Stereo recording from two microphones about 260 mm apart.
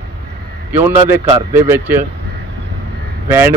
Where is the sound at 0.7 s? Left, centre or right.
Centre.